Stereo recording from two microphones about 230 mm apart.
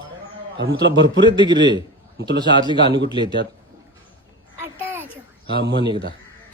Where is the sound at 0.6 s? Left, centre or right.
Right.